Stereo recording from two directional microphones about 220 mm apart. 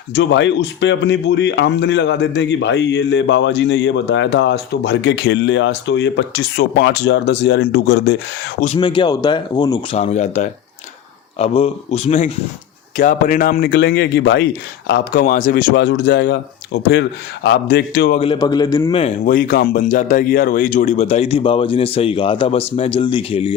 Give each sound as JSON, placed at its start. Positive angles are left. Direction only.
{"t": 0.1, "sound": "speech", "side_deg": 50}
{"t": 8.6, "sound": "speech", "side_deg": 25}
{"t": 10.0, "sound": "speech", "side_deg": 30}
{"t": 18.2, "sound": "speech", "side_deg": 20}
{"t": 19.2, "sound": "speech", "side_deg": 40}